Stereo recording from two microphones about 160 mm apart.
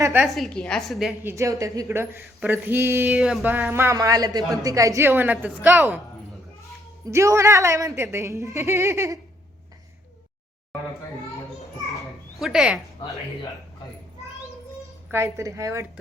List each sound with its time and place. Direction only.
0.0 s a woman's voice: 15° right (ahead or behind)
0.3 s a woman's voice: centre (ahead or behind)
1.2 s speech: 15° right (ahead or behind)
3.2 s a woman's voice: centre (ahead or behind)
3.4 s speech: 15° right (ahead or behind)
7.1 s speech: 20° right (ahead or behind)
12.4 s a woman's voice: 5° right (ahead or behind)
15.1 s speech: 20° right (ahead or behind)